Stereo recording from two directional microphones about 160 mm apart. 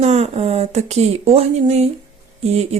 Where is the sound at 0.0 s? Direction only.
45° right (ahead or behind).